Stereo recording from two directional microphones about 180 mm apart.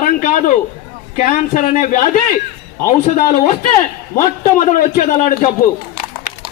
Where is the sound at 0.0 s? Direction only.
45° left (ahead or behind).